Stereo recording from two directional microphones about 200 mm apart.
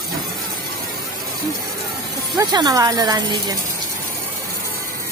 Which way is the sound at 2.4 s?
20° right (ahead or behind).